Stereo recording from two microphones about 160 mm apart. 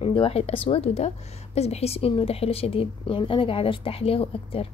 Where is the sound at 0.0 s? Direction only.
35° left (ahead or behind).